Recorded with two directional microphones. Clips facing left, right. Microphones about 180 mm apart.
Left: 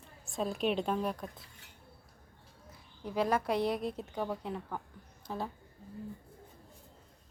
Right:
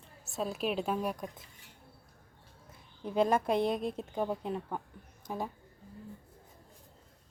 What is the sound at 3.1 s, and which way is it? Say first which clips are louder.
A woman's voice: right 3 dB; 25° right (ahead or behind).